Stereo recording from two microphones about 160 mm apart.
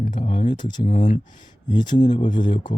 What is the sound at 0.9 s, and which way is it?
Speech, 45° left (ahead or behind).